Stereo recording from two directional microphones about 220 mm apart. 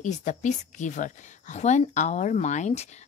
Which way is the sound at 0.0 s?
35° left (ahead or behind).